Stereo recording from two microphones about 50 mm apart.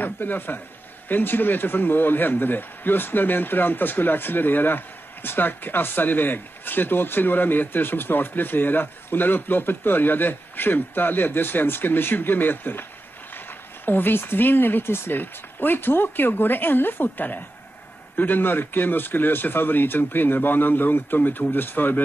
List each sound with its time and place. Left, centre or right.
0.0 s speech: left
13.8 s speech: left